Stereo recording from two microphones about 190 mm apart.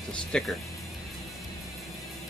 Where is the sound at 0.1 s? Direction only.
5° left (ahead or behind).